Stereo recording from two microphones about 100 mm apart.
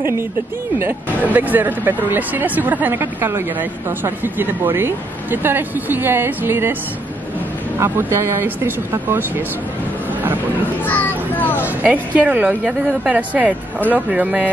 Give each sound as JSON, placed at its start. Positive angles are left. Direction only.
{"t": 0.7, "sound": "speech", "side_deg": -20}
{"t": 7.8, "sound": "speech", "side_deg": -25}
{"t": 10.9, "sound": "speech", "side_deg": 15}
{"t": 11.6, "sound": "a woman's voice", "side_deg": -15}